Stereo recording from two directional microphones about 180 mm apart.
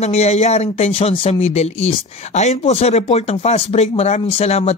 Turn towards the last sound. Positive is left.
turn(degrees=35)  # may be behind; listen again after turning